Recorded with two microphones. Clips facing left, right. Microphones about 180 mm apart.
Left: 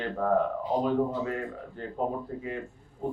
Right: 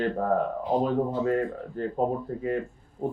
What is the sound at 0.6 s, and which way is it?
A man's voice, 55° right (ahead or behind).